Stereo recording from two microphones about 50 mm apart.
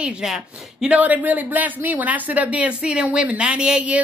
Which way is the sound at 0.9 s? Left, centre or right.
Right.